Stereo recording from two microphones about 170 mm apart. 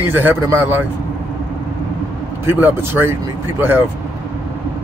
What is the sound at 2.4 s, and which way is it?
Speech, 15° right (ahead or behind).